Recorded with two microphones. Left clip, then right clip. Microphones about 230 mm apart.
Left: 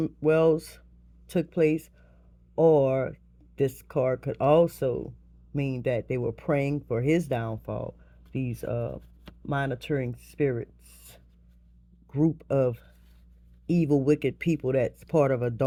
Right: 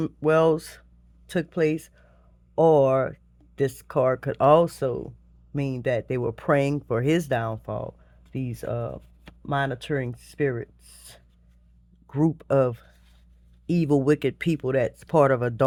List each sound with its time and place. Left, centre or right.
0.0 s speech: right